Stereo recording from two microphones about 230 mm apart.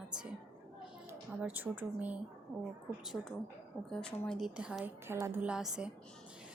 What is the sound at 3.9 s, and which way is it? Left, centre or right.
A woman's voice, centre.